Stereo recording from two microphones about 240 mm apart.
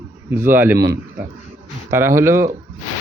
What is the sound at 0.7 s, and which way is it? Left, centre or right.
Speech, right.